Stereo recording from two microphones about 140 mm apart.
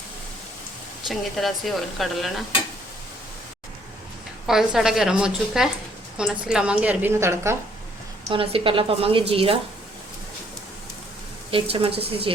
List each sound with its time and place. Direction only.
1.0 s a woman's voice: centre (ahead or behind)
4.4 s a woman's voice: 5° right (ahead or behind)
8.3 s a woman's voice: 40° right (ahead or behind)
11.5 s a woman's voice: 40° right (ahead or behind)